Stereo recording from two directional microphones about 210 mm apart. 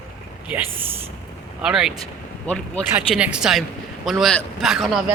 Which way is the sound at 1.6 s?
Centre (ahead or behind).